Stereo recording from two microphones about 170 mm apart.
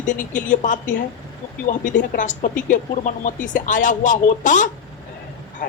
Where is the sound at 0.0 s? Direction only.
50° left (ahead or behind).